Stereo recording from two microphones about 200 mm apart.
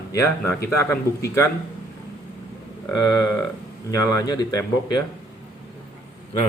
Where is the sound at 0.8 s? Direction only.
15° left (ahead or behind).